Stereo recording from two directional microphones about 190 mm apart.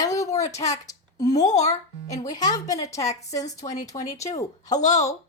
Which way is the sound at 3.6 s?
40° left (ahead or behind).